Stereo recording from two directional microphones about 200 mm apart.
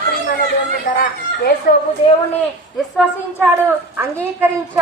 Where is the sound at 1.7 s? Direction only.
45° left (ahead or behind).